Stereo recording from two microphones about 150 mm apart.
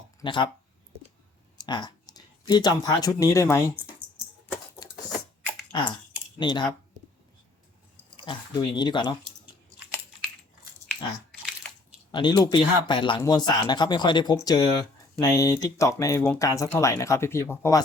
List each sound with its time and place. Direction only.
0.2 s speech: 30° left (ahead or behind)
1.5 s clicking: 30° left (ahead or behind)
2.5 s speech: 25° left (ahead or behind)
5.7 s speech: 35° left (ahead or behind)
8.1 s speech: 30° left (ahead or behind)
11.3 s a sound: centre (ahead or behind)
12.1 s speech: 30° left (ahead or behind)